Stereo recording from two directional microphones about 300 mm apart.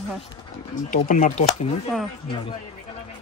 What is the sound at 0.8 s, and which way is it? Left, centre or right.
Speech, left.